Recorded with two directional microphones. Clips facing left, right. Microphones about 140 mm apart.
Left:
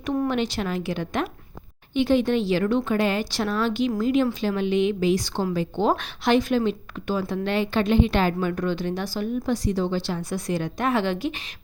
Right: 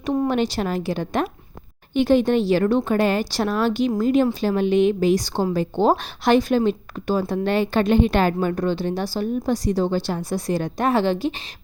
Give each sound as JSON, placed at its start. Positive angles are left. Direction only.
{"t": 0.3, "sound": "speech", "side_deg": -40}